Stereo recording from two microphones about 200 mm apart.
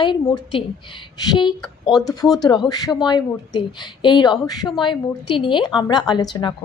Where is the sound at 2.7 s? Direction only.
20° left (ahead or behind).